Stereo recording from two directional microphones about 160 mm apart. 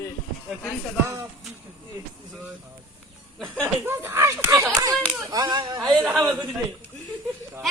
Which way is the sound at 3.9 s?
15° right (ahead or behind).